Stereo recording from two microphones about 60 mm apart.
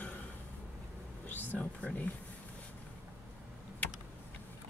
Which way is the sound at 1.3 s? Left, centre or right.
Left.